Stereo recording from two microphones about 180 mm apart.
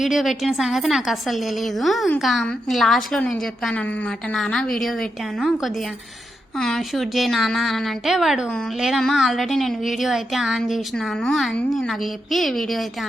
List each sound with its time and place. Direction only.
0.0 s a woman's voice: centre (ahead or behind)